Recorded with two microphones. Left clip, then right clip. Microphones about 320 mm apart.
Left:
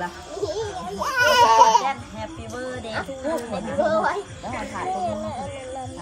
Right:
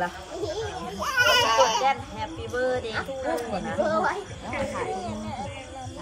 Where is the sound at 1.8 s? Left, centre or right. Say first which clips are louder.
Right 2 dB; centre.